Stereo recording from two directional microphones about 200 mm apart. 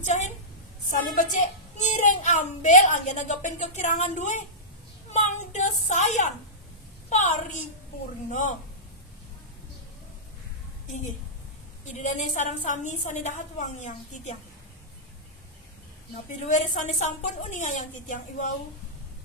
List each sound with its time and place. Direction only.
0.0 s a sound: 35° left (ahead or behind)
0.8 s a child's voice: 40° left (ahead or behind)
5.1 s a sound: 35° left (ahead or behind)
8.3 s a woman's voice: 40° left (ahead or behind)
10.9 s a woman's voice: 35° left (ahead or behind)
16.4 s a woman's voice: 35° left (ahead or behind)